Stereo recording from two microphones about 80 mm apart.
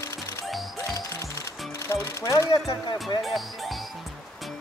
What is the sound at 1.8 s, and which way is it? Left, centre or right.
Speech, left.